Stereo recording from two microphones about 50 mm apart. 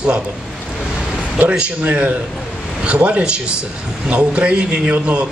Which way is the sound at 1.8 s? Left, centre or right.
Right.